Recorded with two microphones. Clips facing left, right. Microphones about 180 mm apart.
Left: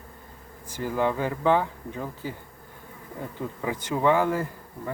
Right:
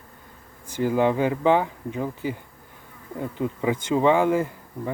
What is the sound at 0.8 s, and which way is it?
Speech, 20° right (ahead or behind).